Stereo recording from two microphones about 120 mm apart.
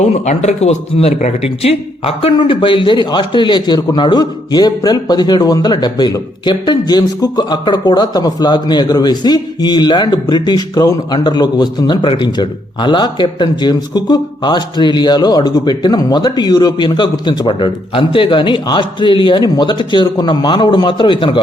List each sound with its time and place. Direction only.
0.0 s a man's voice: 70° left (ahead or behind); by 2.3 s 55° left (ahead or behind)
2.3 s a man's voice: 45° left (ahead or behind)